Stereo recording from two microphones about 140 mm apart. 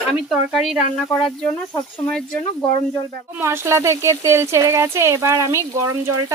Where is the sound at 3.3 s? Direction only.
15° right (ahead or behind).